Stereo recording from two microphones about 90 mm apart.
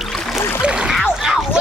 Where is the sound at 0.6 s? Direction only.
10° right (ahead or behind).